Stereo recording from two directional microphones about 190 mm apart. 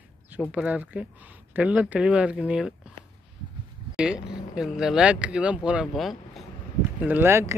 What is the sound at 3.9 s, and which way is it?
Speech, 5° right (ahead or behind).